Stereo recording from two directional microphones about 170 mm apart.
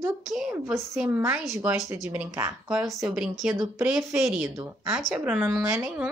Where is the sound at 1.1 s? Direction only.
10° right (ahead or behind).